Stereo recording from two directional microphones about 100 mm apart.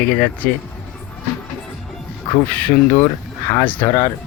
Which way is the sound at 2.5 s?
15° left (ahead or behind).